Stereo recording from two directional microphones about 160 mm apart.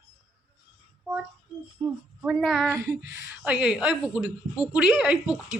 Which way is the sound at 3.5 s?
5° right (ahead or behind).